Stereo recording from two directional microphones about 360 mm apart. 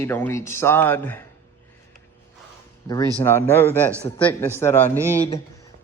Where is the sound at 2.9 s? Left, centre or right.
Centre.